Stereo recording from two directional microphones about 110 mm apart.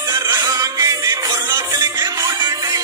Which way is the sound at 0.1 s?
35° right (ahead or behind).